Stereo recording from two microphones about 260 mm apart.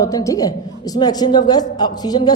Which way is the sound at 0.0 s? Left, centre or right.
Centre.